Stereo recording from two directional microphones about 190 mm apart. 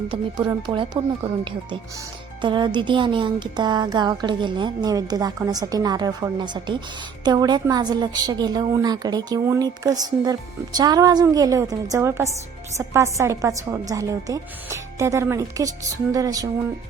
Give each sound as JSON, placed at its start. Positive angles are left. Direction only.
{"t": 0.1, "sound": "a woman's voice", "side_deg": -25}